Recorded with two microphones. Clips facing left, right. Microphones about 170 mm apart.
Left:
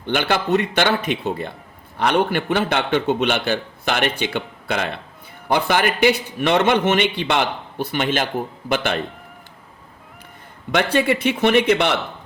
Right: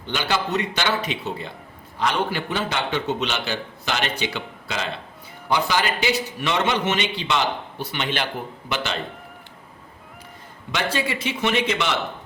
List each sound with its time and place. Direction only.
0.0 s a man's voice: 55° left (ahead or behind)
10.7 s a man's voice: 55° left (ahead or behind)